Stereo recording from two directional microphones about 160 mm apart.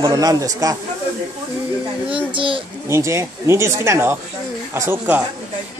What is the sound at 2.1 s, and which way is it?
Speech, 30° right (ahead or behind).